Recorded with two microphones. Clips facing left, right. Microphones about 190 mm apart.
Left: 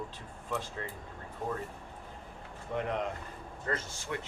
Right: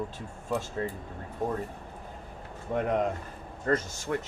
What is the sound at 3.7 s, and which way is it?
Speech, 45° right (ahead or behind).